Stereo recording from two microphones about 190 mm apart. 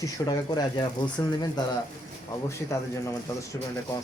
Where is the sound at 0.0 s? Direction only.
20° left (ahead or behind).